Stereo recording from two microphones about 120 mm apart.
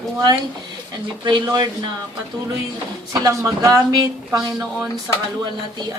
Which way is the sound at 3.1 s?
30° right (ahead or behind).